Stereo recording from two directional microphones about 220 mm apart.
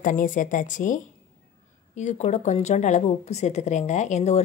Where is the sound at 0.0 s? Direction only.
35° left (ahead or behind).